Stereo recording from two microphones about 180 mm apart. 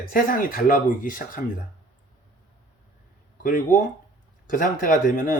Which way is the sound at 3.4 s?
45° left (ahead or behind).